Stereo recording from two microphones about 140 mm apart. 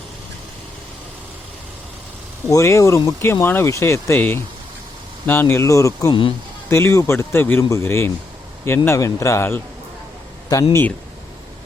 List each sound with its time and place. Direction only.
2.5 s speech: 20° left (ahead or behind)